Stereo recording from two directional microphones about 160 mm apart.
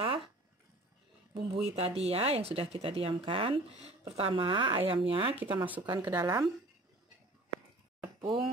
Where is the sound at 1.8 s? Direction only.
40° right (ahead or behind).